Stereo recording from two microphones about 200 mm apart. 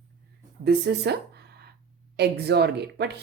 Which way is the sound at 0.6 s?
55° right (ahead or behind).